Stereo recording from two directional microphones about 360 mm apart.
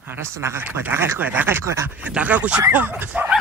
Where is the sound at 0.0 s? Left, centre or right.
Centre.